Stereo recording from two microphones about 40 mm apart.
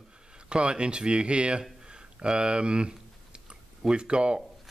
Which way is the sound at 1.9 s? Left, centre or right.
Right.